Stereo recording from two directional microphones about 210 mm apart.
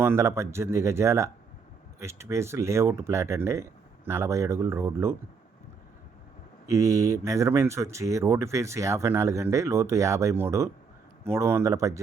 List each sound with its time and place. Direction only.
0.0 s speech: 10° right (ahead or behind)
6.7 s speech: 15° right (ahead or behind)